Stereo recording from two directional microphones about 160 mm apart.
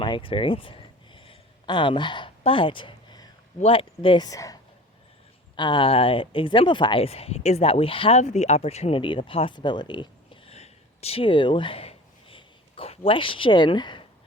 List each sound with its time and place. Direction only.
0.0 s a sound: 30° left (ahead or behind)
3.6 s speech: 35° left (ahead or behind)
8.2 s speech: 45° left (ahead or behind); by 14.1 s 30° left (ahead or behind)